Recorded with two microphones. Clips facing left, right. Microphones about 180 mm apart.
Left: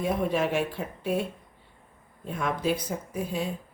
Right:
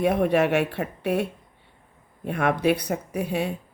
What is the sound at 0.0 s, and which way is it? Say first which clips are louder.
Speech: right 6 dB; 65° right (ahead or behind).